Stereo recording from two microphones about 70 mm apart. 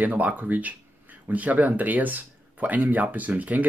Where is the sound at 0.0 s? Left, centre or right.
Right.